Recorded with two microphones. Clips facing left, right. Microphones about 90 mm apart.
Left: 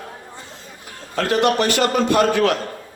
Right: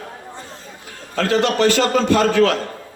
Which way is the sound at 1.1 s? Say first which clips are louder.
Even; 15° left (ahead or behind).